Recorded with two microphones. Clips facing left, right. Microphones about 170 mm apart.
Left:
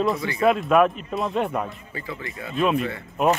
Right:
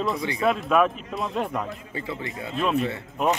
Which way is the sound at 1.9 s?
25° right (ahead or behind).